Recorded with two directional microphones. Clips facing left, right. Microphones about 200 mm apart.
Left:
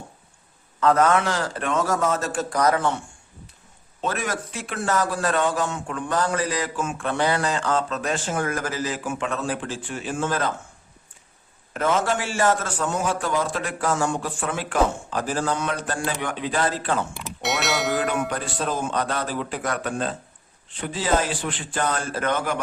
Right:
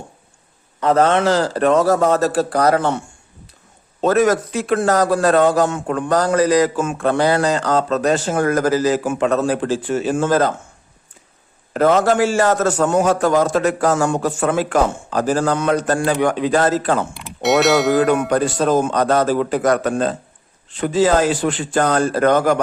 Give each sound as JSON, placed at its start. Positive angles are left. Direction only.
{"t": 0.9, "sound": "speech", "side_deg": -30}
{"t": 4.0, "sound": "speech", "side_deg": -40}
{"t": 12.2, "sound": "a man's voice", "side_deg": -40}
{"t": 17.2, "sound": "a sound", "side_deg": 0}
{"t": 18.3, "sound": "a man's voice", "side_deg": -45}